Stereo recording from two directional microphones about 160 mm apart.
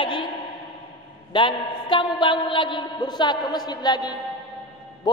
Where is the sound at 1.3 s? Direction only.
30° left (ahead or behind).